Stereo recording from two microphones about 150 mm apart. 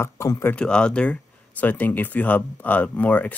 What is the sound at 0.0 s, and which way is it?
A man's voice, 15° left (ahead or behind).